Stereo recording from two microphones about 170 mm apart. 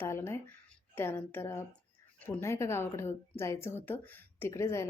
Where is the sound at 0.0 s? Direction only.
15° left (ahead or behind).